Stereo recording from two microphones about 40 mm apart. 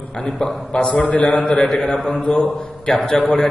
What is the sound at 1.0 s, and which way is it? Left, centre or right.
Speech, left.